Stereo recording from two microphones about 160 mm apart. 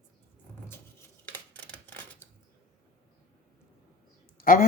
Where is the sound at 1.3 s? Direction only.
10° left (ahead or behind).